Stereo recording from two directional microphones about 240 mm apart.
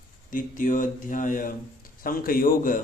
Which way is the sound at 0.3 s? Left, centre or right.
Left.